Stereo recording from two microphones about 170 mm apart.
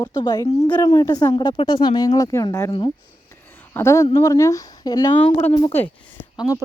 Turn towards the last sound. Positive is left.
turn(degrees=20)  # may be behind; listen again after turning